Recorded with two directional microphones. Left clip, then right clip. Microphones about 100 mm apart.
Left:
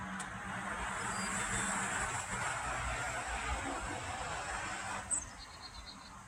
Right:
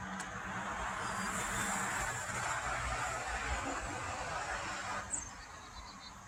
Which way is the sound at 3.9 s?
35° left (ahead or behind).